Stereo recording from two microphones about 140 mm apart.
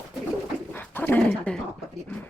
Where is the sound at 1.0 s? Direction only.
10° left (ahead or behind).